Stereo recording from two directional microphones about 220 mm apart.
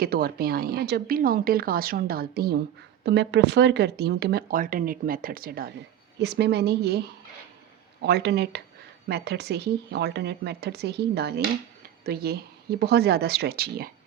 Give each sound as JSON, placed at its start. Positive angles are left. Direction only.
{"t": 0.0, "sound": "speech", "side_deg": -45}
{"t": 8.0, "sound": "speech", "side_deg": -50}